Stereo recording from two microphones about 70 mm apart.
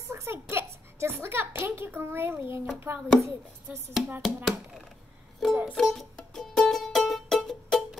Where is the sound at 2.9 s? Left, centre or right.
Right.